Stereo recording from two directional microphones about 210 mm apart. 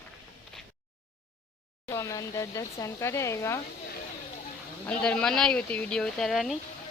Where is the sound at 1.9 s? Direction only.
15° left (ahead or behind).